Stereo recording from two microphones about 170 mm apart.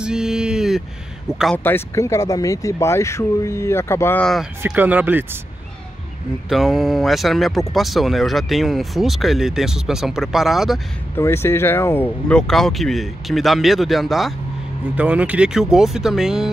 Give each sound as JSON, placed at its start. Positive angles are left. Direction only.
{"t": 0.0, "sound": "a sound", "side_deg": -5}
{"t": 1.4, "sound": "speech", "side_deg": 10}
{"t": 4.6, "sound": "speech", "side_deg": -10}
{"t": 6.5, "sound": "speech", "side_deg": 0}
{"t": 11.1, "sound": "speech", "side_deg": 15}